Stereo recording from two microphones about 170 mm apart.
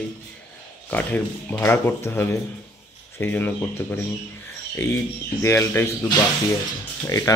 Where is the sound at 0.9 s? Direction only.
10° left (ahead or behind).